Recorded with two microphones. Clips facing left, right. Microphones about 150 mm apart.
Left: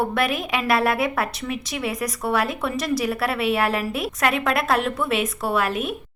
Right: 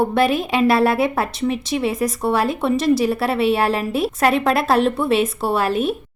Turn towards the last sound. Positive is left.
turn(degrees=-30)  # may be behind; listen again after turning